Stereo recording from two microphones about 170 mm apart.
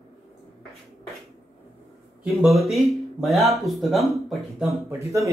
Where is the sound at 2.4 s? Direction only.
Centre (ahead or behind).